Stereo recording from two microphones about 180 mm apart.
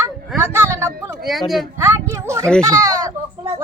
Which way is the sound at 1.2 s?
Centre (ahead or behind).